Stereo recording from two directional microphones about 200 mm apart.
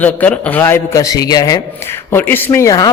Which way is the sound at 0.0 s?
10° left (ahead or behind).